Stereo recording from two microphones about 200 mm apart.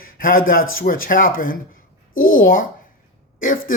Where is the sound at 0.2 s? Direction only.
45° left (ahead or behind).